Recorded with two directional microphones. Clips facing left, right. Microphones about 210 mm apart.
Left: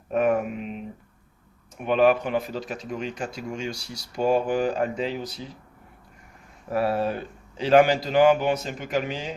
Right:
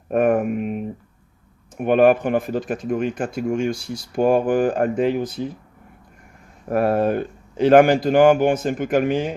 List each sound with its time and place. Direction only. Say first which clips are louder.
0.1 s speech: right 5 dB; 50° right (ahead or behind)
6.7 s speech: right 6 dB; 50° right (ahead or behind)